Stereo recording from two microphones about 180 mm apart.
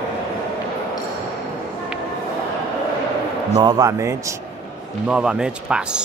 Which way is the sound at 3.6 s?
20° right (ahead or behind).